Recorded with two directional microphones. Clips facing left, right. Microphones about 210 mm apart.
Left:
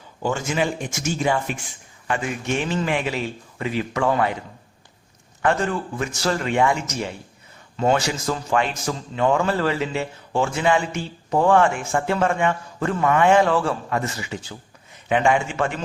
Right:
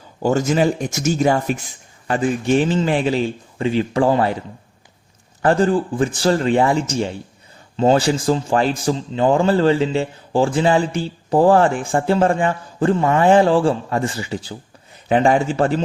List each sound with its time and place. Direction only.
0.2 s speech: 40° right (ahead or behind)
5.4 s speech: 35° right (ahead or behind)